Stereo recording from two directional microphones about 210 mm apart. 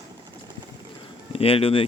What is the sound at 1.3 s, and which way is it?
Speech, 25° left (ahead or behind).